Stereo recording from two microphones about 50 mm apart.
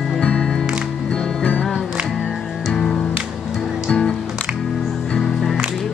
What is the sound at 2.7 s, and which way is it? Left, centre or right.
Music, centre.